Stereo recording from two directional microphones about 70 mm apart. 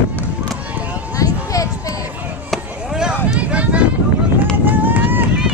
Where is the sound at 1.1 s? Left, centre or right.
Left.